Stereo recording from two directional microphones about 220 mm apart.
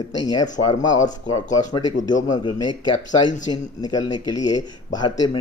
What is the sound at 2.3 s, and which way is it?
Speech, 20° left (ahead or behind).